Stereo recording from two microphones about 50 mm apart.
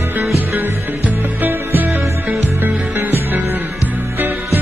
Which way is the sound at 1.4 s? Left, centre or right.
Right.